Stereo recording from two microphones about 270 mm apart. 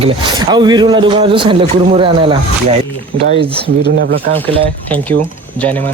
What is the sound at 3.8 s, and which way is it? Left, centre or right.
Speech, right.